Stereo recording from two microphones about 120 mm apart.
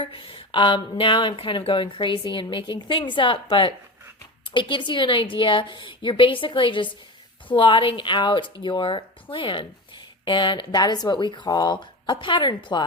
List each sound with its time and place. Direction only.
0.0 s a woman's voice: 45° left (ahead or behind)